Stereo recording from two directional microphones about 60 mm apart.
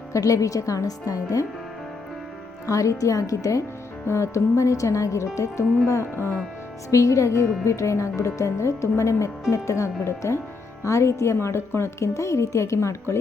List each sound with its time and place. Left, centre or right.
0.1 s a woman's voice: left
2.6 s speech: left
4.0 s a woman's voice: left
6.9 s a woman's voice: left